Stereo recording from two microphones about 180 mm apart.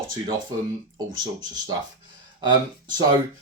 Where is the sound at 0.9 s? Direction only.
20° right (ahead or behind).